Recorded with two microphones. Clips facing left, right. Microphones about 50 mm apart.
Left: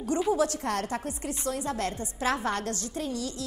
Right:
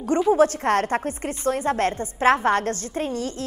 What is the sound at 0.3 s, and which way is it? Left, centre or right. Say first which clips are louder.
Speech: right 11 dB; right.